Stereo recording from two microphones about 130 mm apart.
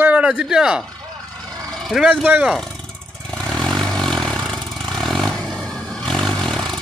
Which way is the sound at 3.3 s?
5° left (ahead or behind).